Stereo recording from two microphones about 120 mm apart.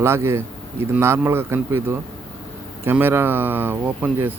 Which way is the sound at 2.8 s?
20° right (ahead or behind).